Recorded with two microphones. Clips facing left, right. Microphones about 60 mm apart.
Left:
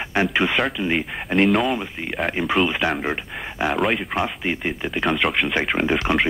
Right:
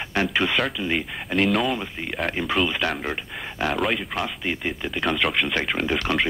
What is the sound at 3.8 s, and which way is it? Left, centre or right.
Speech, centre.